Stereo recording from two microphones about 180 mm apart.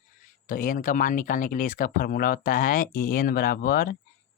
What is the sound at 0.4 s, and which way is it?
Speech, 50° left (ahead or behind).